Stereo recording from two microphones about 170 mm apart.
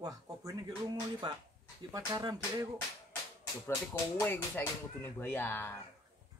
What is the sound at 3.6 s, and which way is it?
Speech, 15° left (ahead or behind).